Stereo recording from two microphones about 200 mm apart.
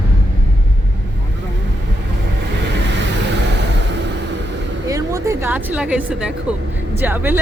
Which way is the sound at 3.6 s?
60° right (ahead or behind).